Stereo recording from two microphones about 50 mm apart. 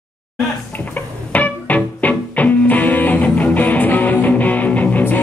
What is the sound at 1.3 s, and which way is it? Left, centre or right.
Music, left.